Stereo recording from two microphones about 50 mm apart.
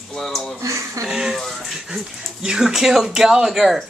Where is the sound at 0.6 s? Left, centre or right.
Right.